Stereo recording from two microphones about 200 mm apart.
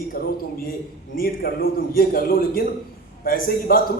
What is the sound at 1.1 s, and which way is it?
A man's voice, 50° left (ahead or behind).